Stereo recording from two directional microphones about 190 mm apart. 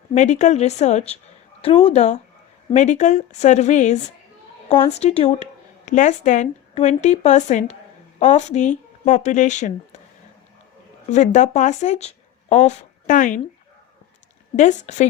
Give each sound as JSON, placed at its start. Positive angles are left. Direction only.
{"t": 0.1, "sound": "speech", "side_deg": 35}
{"t": 11.1, "sound": "speech", "side_deg": 40}
{"t": 14.5, "sound": "speech", "side_deg": 40}